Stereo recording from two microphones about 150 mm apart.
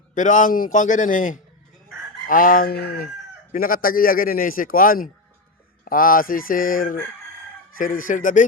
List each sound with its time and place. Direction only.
0.1 s a man's voice: 60° left (ahead or behind)
2.2 s fowl: 65° left (ahead or behind); by 3.1 s 90° left
3.5 s a man's voice: 70° left (ahead or behind)